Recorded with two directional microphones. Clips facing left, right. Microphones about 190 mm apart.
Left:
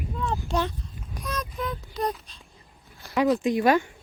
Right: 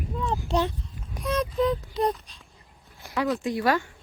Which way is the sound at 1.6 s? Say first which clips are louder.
Right 8 dB; 35° right (ahead or behind).